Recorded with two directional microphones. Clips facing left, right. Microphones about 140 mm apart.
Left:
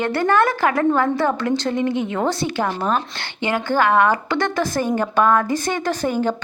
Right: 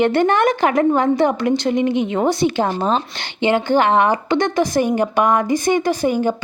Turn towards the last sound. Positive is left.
turn(degrees=-15)  # may be behind; listen again after turning